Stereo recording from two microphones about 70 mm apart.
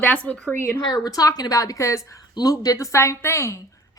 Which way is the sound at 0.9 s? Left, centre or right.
Left.